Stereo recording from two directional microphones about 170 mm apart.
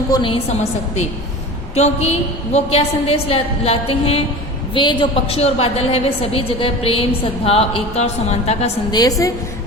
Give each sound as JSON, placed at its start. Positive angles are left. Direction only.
{"t": 0.1, "sound": "a woman's voice", "side_deg": 30}
{"t": 8.9, "sound": "a woman's voice", "side_deg": 25}